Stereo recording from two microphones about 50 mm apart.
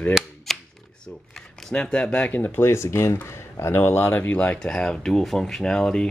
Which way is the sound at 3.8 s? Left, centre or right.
Left.